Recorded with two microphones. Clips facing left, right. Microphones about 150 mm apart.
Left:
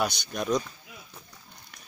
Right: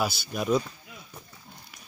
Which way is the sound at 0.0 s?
5° right (ahead or behind).